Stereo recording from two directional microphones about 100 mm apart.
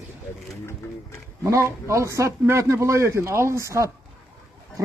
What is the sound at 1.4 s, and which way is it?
A man's voice, 30° right (ahead or behind).